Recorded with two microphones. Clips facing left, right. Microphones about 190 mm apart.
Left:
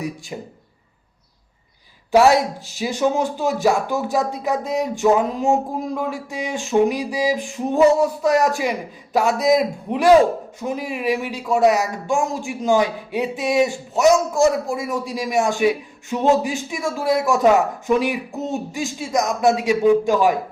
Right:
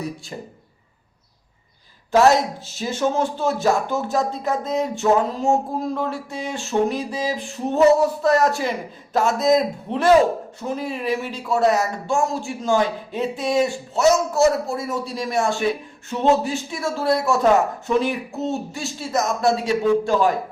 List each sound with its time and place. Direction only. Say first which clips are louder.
2.7 s speech: left 2 dB; 15° left (ahead or behind)